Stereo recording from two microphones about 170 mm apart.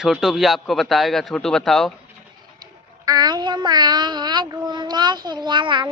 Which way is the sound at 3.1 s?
25° right (ahead or behind).